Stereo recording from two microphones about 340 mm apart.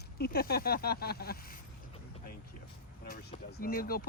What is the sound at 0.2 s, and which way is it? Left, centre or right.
Speech, left.